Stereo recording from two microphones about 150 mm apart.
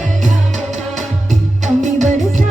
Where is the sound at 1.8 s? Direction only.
55° right (ahead or behind).